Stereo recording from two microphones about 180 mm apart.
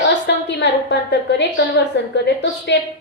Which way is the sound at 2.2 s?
75° left (ahead or behind).